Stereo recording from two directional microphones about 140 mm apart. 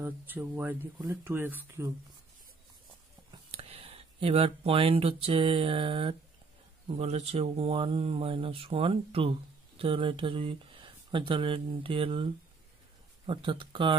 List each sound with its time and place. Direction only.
0.0 s speech: 15° right (ahead or behind)
3.5 s speech: 45° right (ahead or behind)
13.3 s speech: 35° right (ahead or behind)